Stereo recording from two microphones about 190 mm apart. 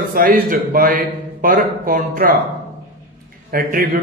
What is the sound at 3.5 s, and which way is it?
Speech, 50° right (ahead or behind).